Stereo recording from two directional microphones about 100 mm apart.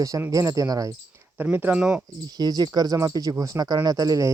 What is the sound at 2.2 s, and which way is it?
Speech, 40° right (ahead or behind).